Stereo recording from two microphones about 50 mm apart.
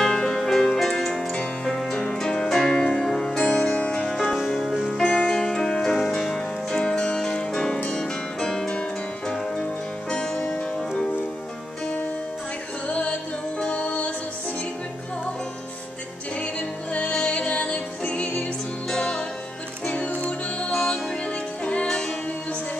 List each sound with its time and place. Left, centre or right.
0.0 s music: centre
1.2 s music: left
1.6 s music: centre
4.5 s music: centre
12.8 s music: left
16.3 s music: left
20.7 s music: centre
21.3 s music: left
21.8 s music: centre